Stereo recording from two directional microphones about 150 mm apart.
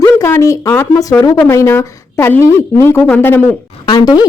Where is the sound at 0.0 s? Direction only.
20° left (ahead or behind).